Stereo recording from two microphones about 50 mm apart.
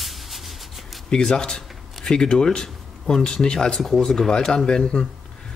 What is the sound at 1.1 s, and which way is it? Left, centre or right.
Speech, centre.